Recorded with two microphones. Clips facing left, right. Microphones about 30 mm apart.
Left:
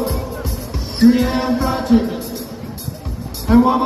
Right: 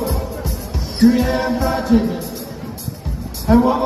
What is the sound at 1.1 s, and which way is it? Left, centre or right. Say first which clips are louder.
Music: left 1 dB; left.